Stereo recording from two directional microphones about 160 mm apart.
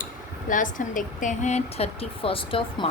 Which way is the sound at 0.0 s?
55° left (ahead or behind).